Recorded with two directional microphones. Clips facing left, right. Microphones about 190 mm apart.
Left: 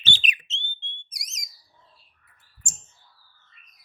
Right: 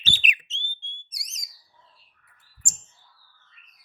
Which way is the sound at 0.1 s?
35° left (ahead or behind).